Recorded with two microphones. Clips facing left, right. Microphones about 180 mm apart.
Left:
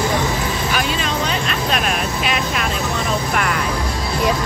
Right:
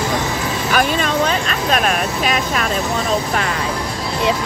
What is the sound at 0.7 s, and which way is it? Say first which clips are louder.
Vehicle: right 8 dB; 45° right (ahead or behind).